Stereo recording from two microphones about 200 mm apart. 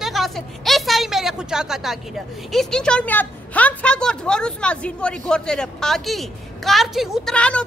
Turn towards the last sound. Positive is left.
turn(degrees=5)  # may be behind; listen again after turning